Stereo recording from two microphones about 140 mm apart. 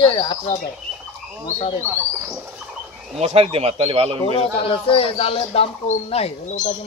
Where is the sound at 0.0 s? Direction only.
35° left (ahead or behind).